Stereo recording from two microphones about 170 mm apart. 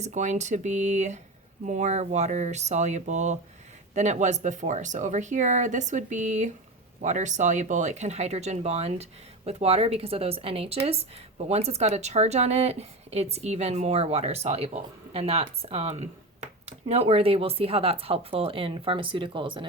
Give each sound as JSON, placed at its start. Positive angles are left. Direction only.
{"t": 0.0, "sound": "speech", "side_deg": -45}